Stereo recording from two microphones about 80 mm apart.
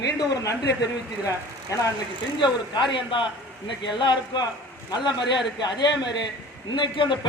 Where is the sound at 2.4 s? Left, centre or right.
Left.